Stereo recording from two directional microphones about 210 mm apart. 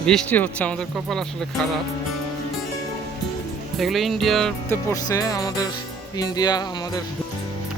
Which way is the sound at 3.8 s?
Centre (ahead or behind).